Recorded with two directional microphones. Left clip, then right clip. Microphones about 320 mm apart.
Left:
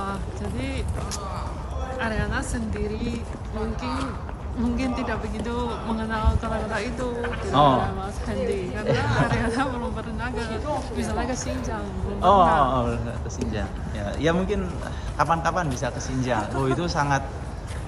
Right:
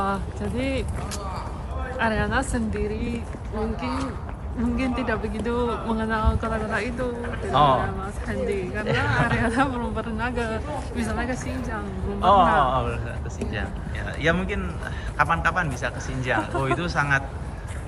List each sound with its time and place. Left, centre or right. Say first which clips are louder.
0.0 s speech: right 4 dB; centre
2.0 s speech: right 5 dB; centre
4.8 s speech: right 4 dB; centre
7.5 s speech: even; left
8.3 s speech: even; centre
8.9 s speech: even; centre
9.2 s speech: right 2 dB; centre
12.2 s speech: even; centre
14.2 s speech: even; centre